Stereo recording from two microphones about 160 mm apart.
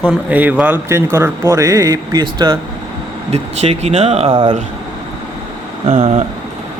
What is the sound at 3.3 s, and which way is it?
Speech, 40° right (ahead or behind).